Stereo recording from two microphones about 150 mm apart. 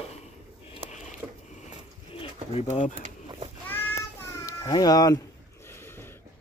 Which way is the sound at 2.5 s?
50° left (ahead or behind).